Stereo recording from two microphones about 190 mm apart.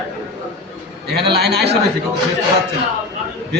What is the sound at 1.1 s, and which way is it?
Speech, 60° right (ahead or behind).